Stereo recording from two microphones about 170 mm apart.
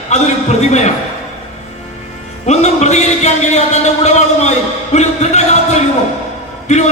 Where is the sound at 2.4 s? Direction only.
40° left (ahead or behind).